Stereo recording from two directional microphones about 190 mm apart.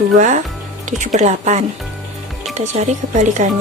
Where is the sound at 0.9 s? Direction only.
40° right (ahead or behind).